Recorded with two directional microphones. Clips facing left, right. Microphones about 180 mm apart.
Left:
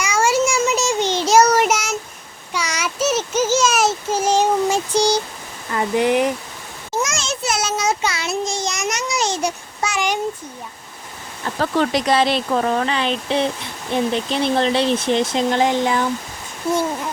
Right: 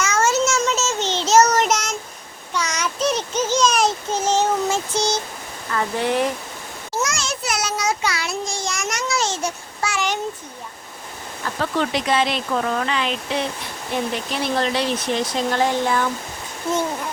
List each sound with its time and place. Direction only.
0.0 s child singing: 10° left (ahead or behind)
5.7 s speech: 15° left (ahead or behind)
7.0 s a sound: 25° left (ahead or behind)
11.6 s speech: 40° left (ahead or behind); by 16.8 s 10° left (ahead or behind)